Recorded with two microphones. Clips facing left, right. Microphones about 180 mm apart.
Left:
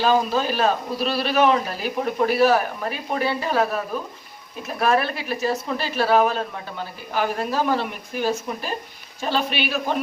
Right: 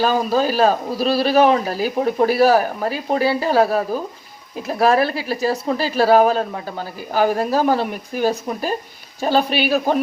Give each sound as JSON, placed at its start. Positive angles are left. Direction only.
{"t": 0.0, "sound": "speech", "side_deg": -40}